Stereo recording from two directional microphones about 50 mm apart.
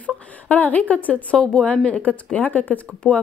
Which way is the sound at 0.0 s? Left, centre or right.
Left.